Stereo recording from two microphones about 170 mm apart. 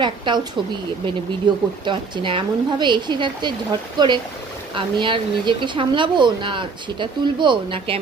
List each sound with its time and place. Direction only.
0.0 s a woman's voice: 25° right (ahead or behind)